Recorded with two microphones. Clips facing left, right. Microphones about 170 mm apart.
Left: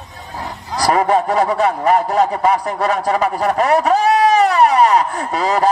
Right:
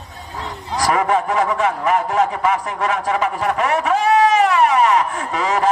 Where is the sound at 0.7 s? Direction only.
35° left (ahead or behind).